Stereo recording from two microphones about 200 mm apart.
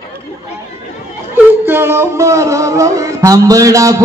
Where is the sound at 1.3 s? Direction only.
10° right (ahead or behind).